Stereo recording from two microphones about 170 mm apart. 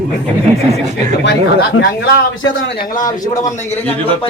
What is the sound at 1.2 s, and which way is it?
Speech, 85° left.